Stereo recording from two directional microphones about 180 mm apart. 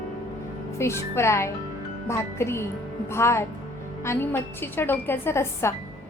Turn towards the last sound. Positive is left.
turn(degrees=15)  # may be behind; listen again after turning